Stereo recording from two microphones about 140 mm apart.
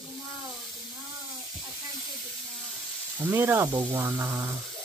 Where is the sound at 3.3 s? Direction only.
15° right (ahead or behind).